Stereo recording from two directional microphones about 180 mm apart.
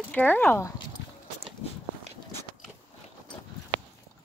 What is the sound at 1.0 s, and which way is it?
Clip-clop, 75° left (ahead or behind).